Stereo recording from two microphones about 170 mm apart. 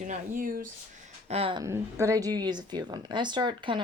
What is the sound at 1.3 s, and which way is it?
Speech, 35° right (ahead or behind).